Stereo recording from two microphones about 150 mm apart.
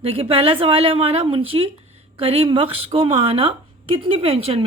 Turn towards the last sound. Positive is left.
turn(degrees=-40)  # may be behind; listen again after turning